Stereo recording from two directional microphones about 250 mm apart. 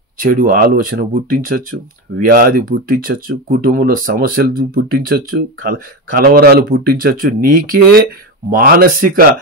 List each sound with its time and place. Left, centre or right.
0.2 s speech: right